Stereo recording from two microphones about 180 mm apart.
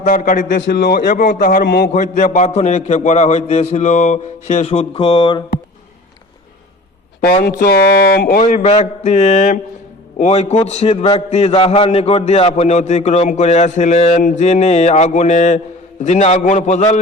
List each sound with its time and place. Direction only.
0.0 s a man's voice: 45° left (ahead or behind)
1.6 s a man's voice: 70° left (ahead or behind)
1.9 s a man's voice: 40° left (ahead or behind)
7.5 s a man's voice: 50° left (ahead or behind)
7.8 s speech: 65° left (ahead or behind)
8.4 s a man's voice: 40° left (ahead or behind)